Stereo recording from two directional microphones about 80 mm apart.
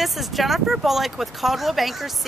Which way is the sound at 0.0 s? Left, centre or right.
Centre.